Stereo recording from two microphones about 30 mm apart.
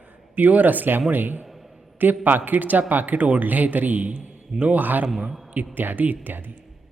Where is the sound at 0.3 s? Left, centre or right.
Right.